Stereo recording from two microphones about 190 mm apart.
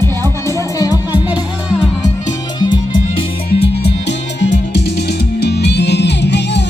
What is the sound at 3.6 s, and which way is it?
Music, 65° left (ahead or behind).